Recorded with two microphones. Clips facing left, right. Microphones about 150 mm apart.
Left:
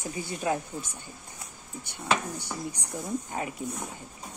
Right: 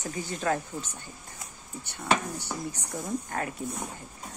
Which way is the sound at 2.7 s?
10° left (ahead or behind).